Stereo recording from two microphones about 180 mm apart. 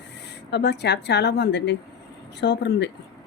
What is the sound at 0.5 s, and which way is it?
A woman's voice, 70° left (ahead or behind).